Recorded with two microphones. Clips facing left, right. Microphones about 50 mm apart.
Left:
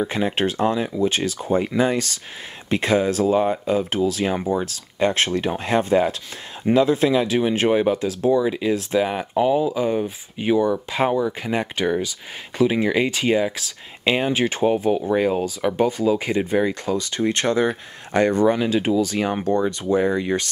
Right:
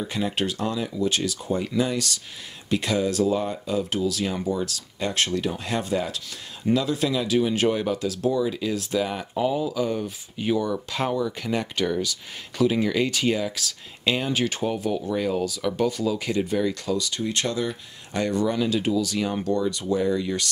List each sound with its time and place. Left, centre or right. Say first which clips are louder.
0.0 s speech: left 5 dB; left